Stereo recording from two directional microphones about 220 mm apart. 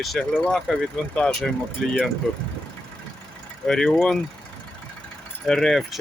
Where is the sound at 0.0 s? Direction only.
5° left (ahead or behind).